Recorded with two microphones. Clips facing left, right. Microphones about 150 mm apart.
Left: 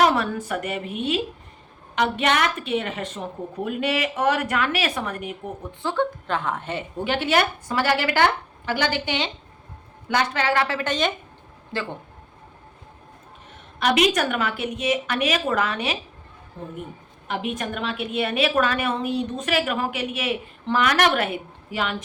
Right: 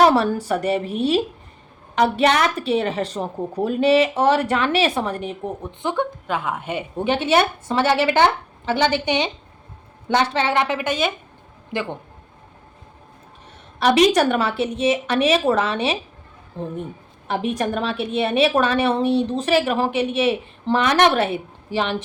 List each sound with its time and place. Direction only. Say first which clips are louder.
0.0 s a woman's voice: right 4 dB; 35° right (ahead or behind)
5.8 s a woman's voice: even; 15° right (ahead or behind)
6.9 s a woman's voice: right 4 dB; 20° right (ahead or behind)
13.7 s a woman's voice: right 5 dB; 35° right (ahead or behind)